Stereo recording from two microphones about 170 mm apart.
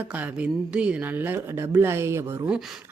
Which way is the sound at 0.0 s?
10° right (ahead or behind).